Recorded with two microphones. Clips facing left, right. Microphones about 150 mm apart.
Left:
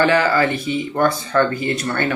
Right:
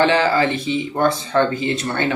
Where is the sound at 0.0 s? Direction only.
25° right (ahead or behind).